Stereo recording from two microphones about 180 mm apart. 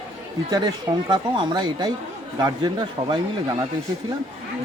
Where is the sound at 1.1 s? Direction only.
25° right (ahead or behind).